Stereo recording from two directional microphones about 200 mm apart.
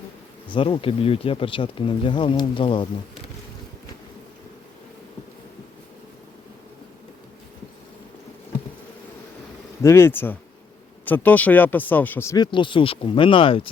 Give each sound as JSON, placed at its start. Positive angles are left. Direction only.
{"t": 0.4, "sound": "speech", "side_deg": 25}
{"t": 9.8, "sound": "speech", "side_deg": 10}